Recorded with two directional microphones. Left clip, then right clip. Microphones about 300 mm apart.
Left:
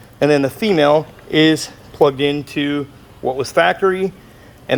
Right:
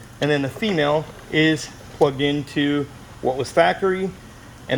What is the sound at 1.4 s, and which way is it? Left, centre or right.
Speech, centre.